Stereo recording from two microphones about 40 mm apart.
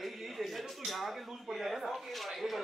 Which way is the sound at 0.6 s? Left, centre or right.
Centre.